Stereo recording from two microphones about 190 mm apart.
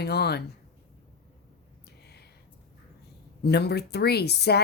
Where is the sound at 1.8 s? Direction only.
60° left (ahead or behind).